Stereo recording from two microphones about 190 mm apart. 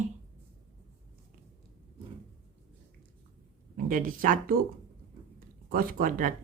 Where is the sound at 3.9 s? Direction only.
45° right (ahead or behind).